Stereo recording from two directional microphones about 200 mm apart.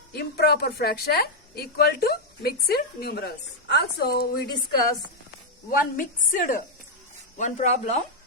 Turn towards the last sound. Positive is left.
turn(degrees=35)  # may be behind; listen again after turning